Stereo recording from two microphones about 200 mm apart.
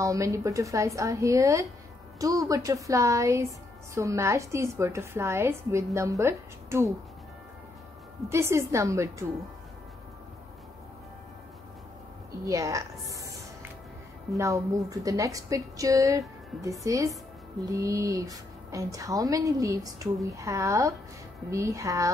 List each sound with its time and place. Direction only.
0.0 s a woman's voice: 15° right (ahead or behind)
8.3 s a woman's voice: 15° right (ahead or behind)
12.4 s a woman's voice: 15° right (ahead or behind)
13.1 s a sound: 15° right (ahead or behind)
14.3 s a woman's voice: 15° right (ahead or behind)